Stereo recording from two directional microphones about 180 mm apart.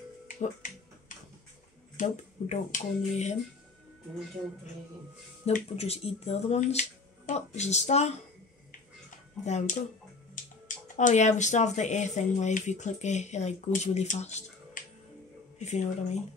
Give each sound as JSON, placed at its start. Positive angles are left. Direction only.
{"t": 0.4, "sound": "finger snapping", "side_deg": 45}
{"t": 2.0, "sound": "speech", "side_deg": 40}
{"t": 5.4, "sound": "speech", "side_deg": 35}
{"t": 9.4, "sound": "speech", "side_deg": 40}
{"t": 10.4, "sound": "music", "side_deg": 45}
{"t": 11.0, "sound": "speech", "side_deg": 40}